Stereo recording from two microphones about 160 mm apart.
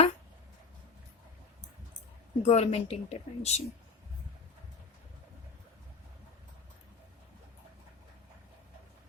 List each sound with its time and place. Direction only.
2.4 s a woman's voice: 40° left (ahead or behind)